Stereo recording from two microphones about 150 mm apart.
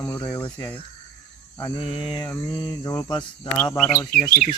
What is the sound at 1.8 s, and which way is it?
Mantra, 35° left (ahead or behind).